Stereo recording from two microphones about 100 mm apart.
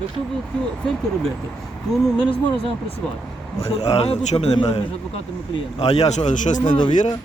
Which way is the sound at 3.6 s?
85° left.